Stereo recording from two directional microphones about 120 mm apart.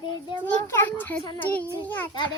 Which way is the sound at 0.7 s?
15° left (ahead or behind).